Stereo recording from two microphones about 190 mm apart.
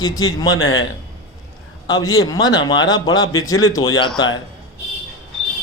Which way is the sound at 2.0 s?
90° left.